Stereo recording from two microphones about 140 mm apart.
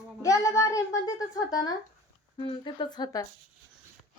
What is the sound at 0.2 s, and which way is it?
A child's voice, 20° left (ahead or behind).